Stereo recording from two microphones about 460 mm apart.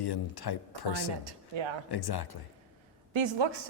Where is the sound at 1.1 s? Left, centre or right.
Right.